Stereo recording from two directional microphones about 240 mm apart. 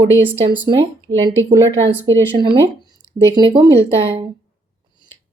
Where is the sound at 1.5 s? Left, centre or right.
Centre.